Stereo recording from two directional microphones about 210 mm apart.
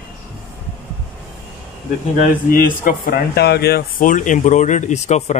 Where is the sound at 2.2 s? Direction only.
40° left (ahead or behind).